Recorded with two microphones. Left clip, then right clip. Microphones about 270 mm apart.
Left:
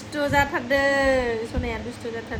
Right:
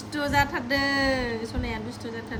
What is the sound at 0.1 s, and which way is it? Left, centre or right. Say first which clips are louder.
A woman's voice: left 3 dB; centre.